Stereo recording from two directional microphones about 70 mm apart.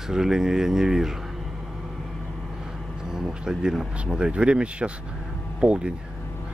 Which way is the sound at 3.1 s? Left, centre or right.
Centre.